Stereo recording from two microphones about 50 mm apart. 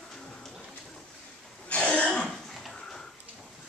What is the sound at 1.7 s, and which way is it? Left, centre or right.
Throat clearing, left.